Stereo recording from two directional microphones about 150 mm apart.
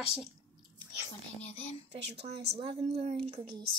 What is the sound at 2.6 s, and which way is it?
A woman's voice, 40° right (ahead or behind).